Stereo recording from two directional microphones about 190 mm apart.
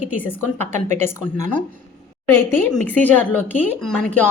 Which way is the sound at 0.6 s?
35° right (ahead or behind).